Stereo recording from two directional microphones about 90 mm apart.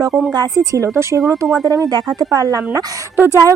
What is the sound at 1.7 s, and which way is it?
A woman's voice, 45° right (ahead or behind).